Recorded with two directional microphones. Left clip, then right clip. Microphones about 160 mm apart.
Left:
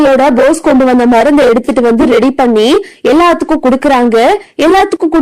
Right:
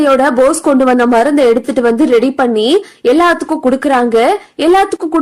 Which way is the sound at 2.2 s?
15° left (ahead or behind).